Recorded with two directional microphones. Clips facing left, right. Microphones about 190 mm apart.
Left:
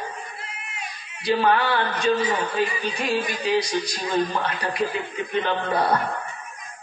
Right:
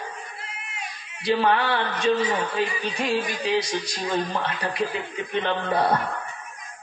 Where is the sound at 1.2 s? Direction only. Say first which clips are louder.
Left 1 dB; 25° right (ahead or behind).